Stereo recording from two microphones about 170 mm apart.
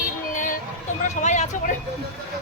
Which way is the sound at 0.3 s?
50° left (ahead or behind).